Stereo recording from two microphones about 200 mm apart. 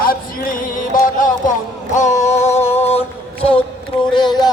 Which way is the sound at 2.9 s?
30° left (ahead or behind).